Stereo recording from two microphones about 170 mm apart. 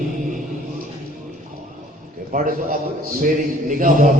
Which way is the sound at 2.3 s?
55° right (ahead or behind).